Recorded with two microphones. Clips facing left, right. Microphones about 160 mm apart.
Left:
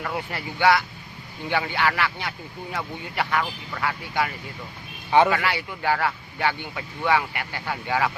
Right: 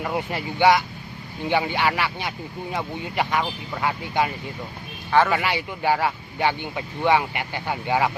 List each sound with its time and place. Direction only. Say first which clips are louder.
0.0 s speech: right 4 dB; 20° right (ahead or behind)
5.3 s speech: right 1 dB; 20° right (ahead or behind)